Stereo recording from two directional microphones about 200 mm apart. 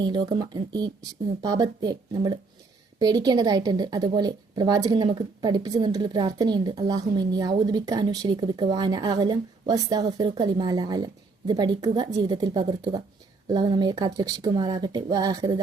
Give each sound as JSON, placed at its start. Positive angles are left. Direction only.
{"t": 0.0, "sound": "a woman's voice", "side_deg": -20}